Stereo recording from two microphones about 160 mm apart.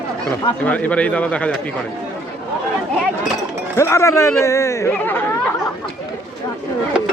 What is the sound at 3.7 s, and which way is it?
Speech, 15° left (ahead or behind).